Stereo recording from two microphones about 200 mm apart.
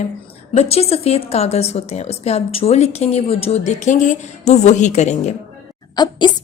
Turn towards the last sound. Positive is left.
turn(degrees=20)  # may be behind; listen again after turning